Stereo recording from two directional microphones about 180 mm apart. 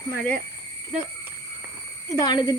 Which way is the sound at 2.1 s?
25° left (ahead or behind).